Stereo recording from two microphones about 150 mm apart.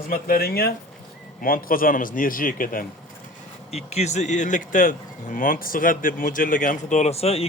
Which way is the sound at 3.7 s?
45° left (ahead or behind).